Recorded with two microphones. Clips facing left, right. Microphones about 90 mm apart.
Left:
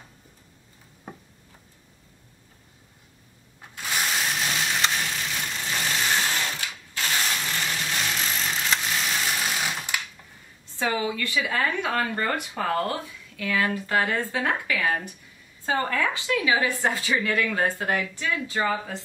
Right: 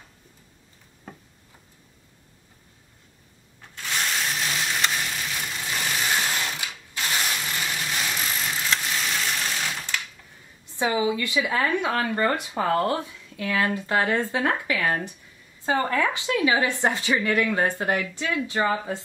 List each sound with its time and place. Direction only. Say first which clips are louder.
1.1 s tick-tock: left 2 dB; 10° left (ahead or behind)
3.7 s a sound: even; 10° left (ahead or behind)
10.8 s speech: right 3 dB; 15° right (ahead or behind)
11.9 s speech: right 2 dB; 5° right (ahead or behind)
12.3 s a woman's voice: right 3 dB; 20° right (ahead or behind)